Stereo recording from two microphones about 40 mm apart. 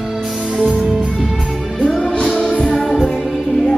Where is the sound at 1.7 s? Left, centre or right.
Centre.